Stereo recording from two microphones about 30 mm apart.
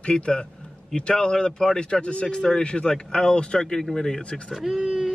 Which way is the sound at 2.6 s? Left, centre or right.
Left.